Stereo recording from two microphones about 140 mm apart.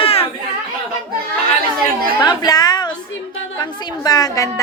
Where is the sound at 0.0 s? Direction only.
45° left (ahead or behind).